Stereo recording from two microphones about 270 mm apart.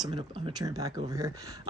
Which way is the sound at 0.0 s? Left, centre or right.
Centre.